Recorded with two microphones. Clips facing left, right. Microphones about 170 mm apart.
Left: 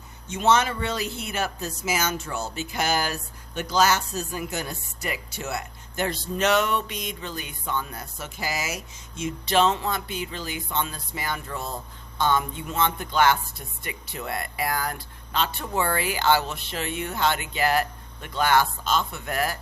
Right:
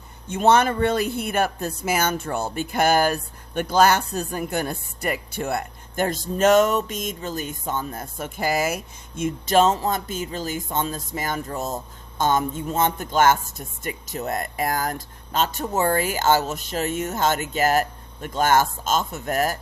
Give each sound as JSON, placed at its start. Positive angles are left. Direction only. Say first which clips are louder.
{"t": 0.3, "sound": "speech", "louder": "right 4 dB", "side_deg": -55}